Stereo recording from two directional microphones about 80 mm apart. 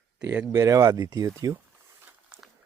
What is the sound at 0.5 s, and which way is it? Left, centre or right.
Speech, right.